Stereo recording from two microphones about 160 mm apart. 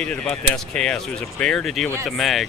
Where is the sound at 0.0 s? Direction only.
10° left (ahead or behind).